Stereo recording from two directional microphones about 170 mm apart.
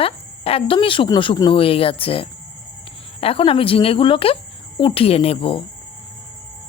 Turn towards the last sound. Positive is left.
turn(degrees=30)  # may be behind; listen again after turning